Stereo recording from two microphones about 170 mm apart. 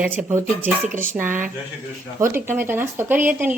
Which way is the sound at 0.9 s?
55° right (ahead or behind).